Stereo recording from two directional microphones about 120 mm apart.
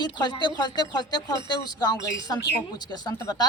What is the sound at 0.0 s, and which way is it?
A woman's voice, 40° left (ahead or behind).